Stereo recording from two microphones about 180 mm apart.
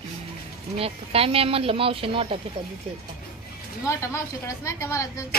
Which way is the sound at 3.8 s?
15° left (ahead or behind).